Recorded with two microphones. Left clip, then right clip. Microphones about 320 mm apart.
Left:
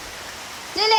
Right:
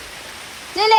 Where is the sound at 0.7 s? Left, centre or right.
Centre.